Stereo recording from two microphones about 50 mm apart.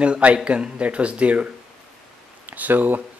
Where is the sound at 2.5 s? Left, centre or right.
Right.